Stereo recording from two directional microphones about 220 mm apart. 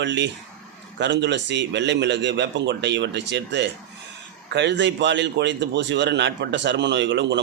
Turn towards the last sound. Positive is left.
turn(degrees=-55)  # may be behind; listen again after turning